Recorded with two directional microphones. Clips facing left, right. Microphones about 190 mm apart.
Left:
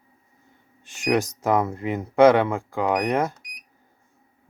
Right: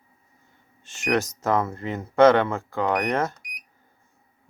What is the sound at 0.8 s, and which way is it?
Speech, 15° left (ahead or behind).